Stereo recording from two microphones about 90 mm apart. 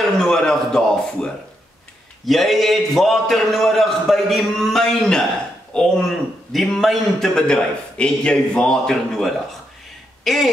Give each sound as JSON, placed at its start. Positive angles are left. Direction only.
{"t": 0.0, "sound": "a man's voice", "side_deg": 5}